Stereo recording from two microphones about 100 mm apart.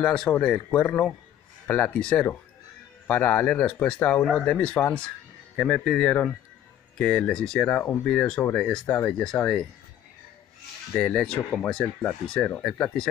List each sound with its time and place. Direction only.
0.0 s speech: 5° left (ahead or behind)
8.8 s speech: 20° left (ahead or behind)
9.1 s speech: 10° left (ahead or behind)
11.0 s speech: 10° left (ahead or behind)